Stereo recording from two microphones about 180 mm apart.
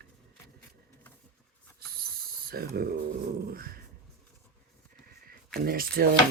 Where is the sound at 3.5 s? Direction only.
55° right (ahead or behind).